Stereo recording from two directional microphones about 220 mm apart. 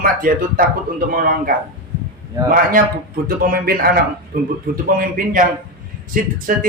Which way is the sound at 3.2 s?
40° right (ahead or behind).